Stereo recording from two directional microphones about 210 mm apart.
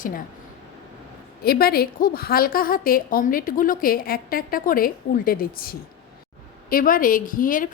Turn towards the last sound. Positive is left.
turn(degrees=40)  # may be behind; listen again after turning